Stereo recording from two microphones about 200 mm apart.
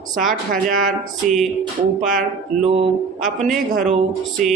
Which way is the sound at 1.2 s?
Centre (ahead or behind).